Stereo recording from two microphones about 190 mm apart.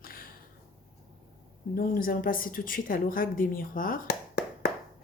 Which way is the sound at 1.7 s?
50° left (ahead or behind).